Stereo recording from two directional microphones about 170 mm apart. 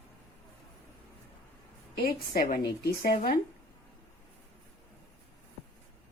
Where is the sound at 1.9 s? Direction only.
65° left (ahead or behind).